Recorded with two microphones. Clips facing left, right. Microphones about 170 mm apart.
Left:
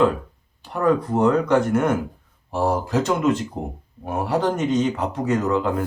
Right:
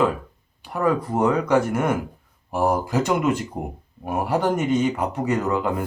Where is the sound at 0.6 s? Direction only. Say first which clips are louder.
Left 2 dB; 5° right (ahead or behind).